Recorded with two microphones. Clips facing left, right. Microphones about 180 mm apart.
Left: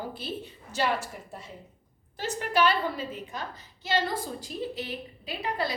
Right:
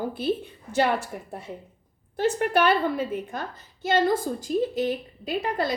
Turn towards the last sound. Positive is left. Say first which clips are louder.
# right 5 dB
turn(degrees=-45)  # may be behind; listen again after turning